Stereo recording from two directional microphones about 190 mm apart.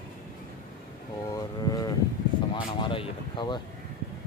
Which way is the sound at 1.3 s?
20° left (ahead or behind).